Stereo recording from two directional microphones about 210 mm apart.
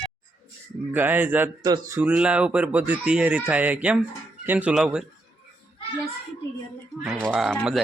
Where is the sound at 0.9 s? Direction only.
10° right (ahead or behind).